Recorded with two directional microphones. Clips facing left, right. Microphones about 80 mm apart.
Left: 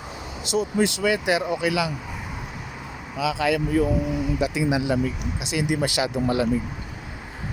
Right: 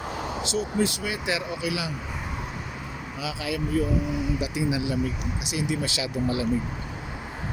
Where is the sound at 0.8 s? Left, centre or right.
Left.